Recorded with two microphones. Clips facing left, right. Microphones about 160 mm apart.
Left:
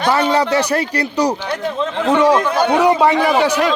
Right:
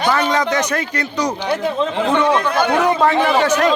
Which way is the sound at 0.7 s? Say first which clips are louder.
Left 3 dB; 35° left (ahead or behind).